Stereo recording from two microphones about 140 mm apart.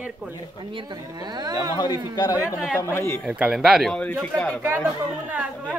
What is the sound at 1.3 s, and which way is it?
Speech, 30° right (ahead or behind).